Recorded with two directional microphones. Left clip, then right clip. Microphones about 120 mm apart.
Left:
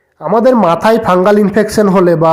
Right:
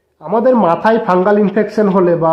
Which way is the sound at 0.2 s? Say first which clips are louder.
Left 3 dB; 40° left (ahead or behind).